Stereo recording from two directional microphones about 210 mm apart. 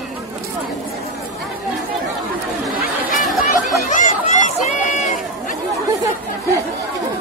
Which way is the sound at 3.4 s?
35° left (ahead or behind).